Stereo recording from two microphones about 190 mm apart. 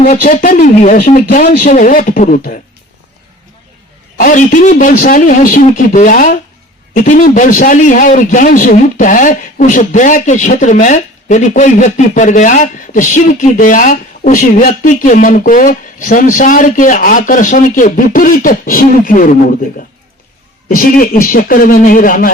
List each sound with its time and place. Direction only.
0.0 s a man's voice: 45° left (ahead or behind)
4.2 s a man's voice: 45° left (ahead or behind)
20.7 s a man's voice: 45° left (ahead or behind)